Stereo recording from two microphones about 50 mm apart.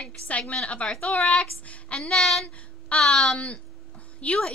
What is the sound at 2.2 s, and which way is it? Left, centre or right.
A woman's voice, centre.